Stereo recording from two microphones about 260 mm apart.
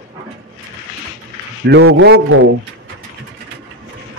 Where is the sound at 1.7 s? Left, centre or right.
Right.